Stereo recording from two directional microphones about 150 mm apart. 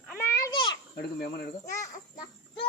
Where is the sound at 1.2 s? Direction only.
90° left.